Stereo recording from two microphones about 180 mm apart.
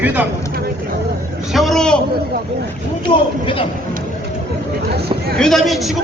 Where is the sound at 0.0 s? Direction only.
10° right (ahead or behind).